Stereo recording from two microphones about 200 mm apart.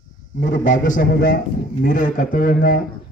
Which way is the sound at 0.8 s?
40° left (ahead or behind).